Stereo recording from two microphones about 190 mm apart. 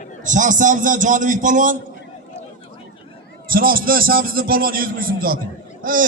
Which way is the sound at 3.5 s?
50° right (ahead or behind).